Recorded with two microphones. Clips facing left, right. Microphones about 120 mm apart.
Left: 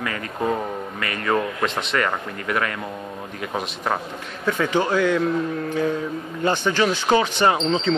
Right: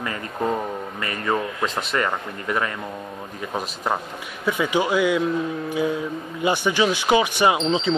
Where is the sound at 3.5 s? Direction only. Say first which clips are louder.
Even; 5° right (ahead or behind).